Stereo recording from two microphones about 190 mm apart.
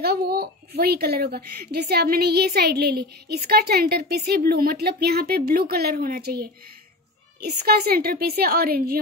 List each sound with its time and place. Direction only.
0.0 s a woman's voice: 55° right (ahead or behind)